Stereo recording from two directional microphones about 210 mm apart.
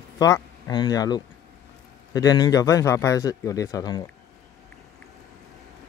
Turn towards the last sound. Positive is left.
turn(degrees=15)  # may be behind; listen again after turning